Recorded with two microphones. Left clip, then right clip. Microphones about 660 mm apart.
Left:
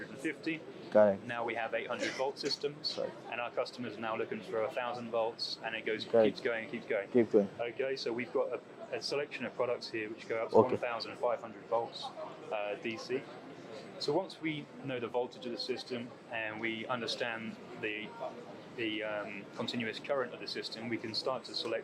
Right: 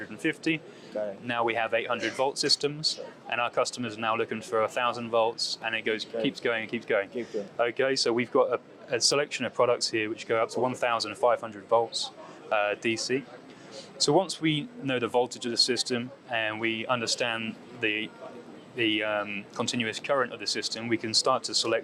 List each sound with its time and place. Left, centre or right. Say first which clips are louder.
0.2 s speech: right 9 dB; right
0.9 s speech: left 7 dB; left
1.3 s speech: right 9 dB; right